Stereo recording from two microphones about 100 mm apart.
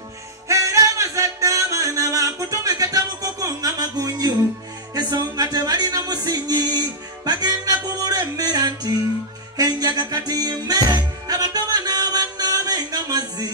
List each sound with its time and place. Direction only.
0.5 s music: 30° right (ahead or behind)